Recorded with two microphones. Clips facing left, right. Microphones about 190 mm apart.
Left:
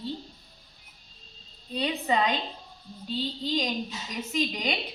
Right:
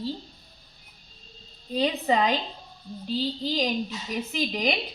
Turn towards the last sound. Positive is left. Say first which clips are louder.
# right 2 dB
turn(degrees=-35)  # may be behind; listen again after turning